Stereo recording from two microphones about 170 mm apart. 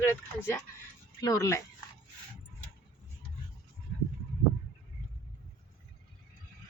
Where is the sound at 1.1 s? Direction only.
20° left (ahead or behind).